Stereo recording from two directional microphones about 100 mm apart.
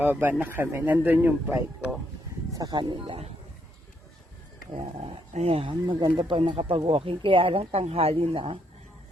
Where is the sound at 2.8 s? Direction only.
55° right (ahead or behind).